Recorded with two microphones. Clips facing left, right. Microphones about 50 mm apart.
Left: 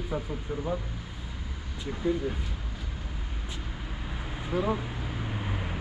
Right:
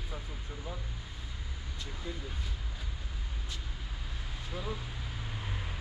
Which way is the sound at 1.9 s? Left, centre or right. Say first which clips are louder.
Left 15 dB; left.